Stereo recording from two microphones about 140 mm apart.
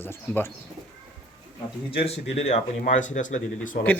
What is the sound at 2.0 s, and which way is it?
Speech, 50° left (ahead or behind).